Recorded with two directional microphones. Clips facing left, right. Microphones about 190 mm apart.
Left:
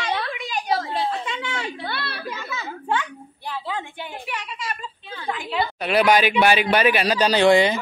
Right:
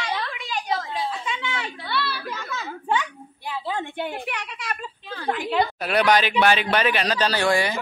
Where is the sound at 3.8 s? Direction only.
60° right (ahead or behind).